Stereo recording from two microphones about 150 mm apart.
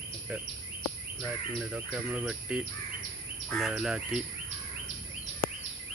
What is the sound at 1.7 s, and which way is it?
Speech, 10° right (ahead or behind).